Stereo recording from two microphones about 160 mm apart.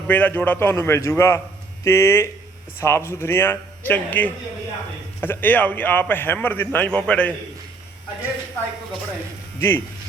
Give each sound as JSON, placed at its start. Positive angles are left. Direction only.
{"t": 0.1, "sound": "a man's voice", "side_deg": 10}
{"t": 9.6, "sound": "speech", "side_deg": 15}